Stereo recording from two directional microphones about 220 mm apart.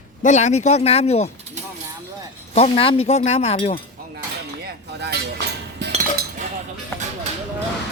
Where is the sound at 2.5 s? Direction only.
25° left (ahead or behind).